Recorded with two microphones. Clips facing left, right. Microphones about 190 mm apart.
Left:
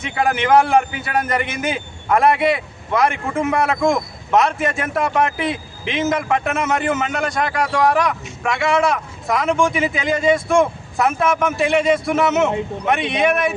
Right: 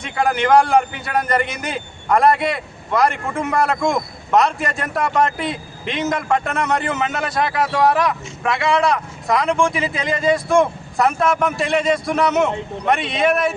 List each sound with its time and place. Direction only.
0.0 s a man's voice: centre (ahead or behind)